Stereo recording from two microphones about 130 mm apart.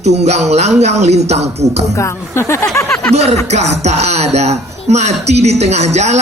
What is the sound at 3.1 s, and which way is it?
Speech, 55° right (ahead or behind).